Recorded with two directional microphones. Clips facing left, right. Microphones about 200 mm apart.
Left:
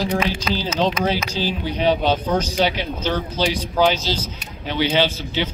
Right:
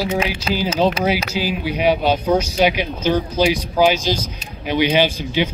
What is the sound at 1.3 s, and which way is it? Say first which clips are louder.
Speech: right 2 dB; 10° right (ahead or behind).